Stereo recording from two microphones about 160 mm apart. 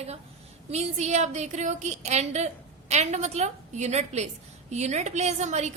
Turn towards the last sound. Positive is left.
turn(degrees=-45)  # may be behind; listen again after turning